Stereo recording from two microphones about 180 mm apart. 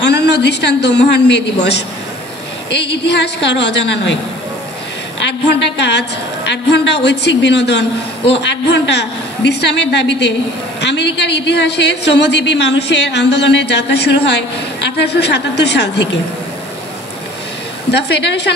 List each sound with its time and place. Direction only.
0.0 s a woman's voice: 70° left (ahead or behind)
3.4 s a woman's voice: 75° left (ahead or behind)
5.2 s a woman's voice: 75° left (ahead or behind)
17.9 s a woman's voice: 70° left (ahead or behind)